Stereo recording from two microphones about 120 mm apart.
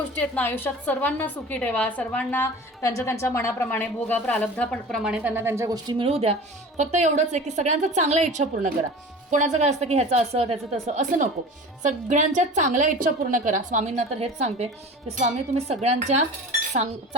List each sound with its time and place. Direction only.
0.2 s a woman's voice: 15° left (ahead or behind)
2.8 s a woman's voice: 25° left (ahead or behind); by 5.3 s 5° right (ahead or behind)
5.3 s a woman's voice: 20° right (ahead or behind)
6.0 s a woman's voice: 55° right (ahead or behind)
6.7 s a woman's voice: 80° right
11.8 s a woman's voice: 90° right; by 17.2 s 65° right (ahead or behind)